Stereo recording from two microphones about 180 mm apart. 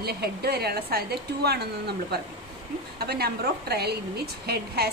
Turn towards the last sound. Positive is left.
turn(degrees=-60)  # may be behind; listen again after turning